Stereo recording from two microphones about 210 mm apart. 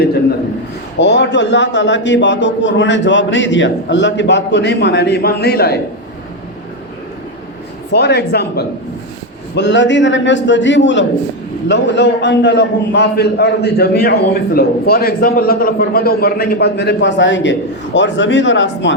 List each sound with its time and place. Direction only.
0.9 s a man's voice: 55° left (ahead or behind)
7.9 s a man's voice: 50° left (ahead or behind)